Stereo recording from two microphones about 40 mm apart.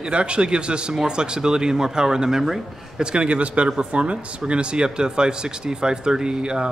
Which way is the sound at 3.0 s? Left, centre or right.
Right.